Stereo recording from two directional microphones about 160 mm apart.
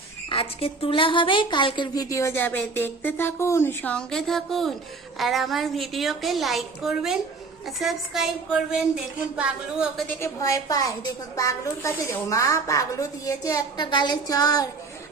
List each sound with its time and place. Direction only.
0.3 s a woman's voice: 35° left (ahead or behind); by 10.1 s 5° right (ahead or behind)
10.1 s a woman's voice: 15° left (ahead or behind)